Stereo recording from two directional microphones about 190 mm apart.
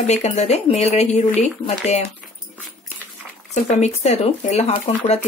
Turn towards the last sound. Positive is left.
turn(degrees=35)  # may be behind; listen again after turning